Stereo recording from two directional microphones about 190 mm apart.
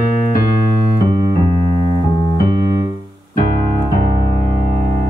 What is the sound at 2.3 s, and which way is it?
Keyboard, 50° left (ahead or behind).